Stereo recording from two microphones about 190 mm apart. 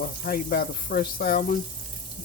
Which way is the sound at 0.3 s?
50° left (ahead or behind).